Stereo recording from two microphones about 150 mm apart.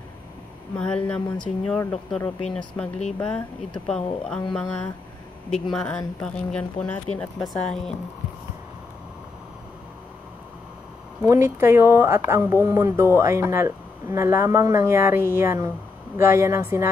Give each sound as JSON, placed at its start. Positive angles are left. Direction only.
{"t": 0.7, "sound": "speech", "side_deg": 10}
{"t": 11.2, "sound": "speech", "side_deg": -15}